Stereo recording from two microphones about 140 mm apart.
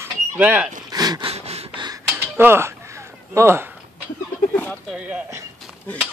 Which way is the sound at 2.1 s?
15° right (ahead or behind).